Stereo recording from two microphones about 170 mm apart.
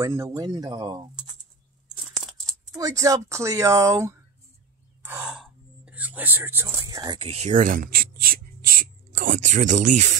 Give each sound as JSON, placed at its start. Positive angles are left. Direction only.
{"t": 0.0, "sound": "speech", "side_deg": -20}
{"t": 2.8, "sound": "speech", "side_deg": -20}
{"t": 5.0, "sound": "speech", "side_deg": -5}
{"t": 9.1, "sound": "speech", "side_deg": -50}